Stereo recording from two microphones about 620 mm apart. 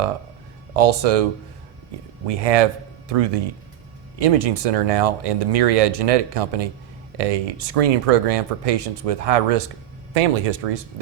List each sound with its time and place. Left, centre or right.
0.8 s speech: right